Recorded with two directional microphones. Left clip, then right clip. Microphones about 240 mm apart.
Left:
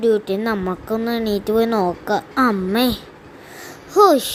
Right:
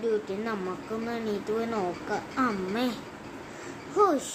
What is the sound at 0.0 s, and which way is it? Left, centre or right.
A woman's voice, left.